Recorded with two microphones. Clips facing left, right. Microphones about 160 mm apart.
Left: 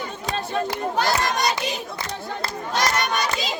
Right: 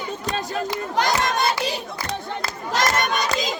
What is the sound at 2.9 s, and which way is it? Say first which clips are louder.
Crowd: right 1 dB; 50° right (ahead or behind).